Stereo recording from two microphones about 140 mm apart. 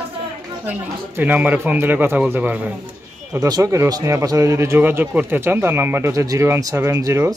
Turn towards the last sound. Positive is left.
turn(degrees=-25)  # may be behind; listen again after turning